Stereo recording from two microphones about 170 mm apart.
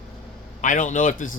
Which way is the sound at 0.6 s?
50° left (ahead or behind).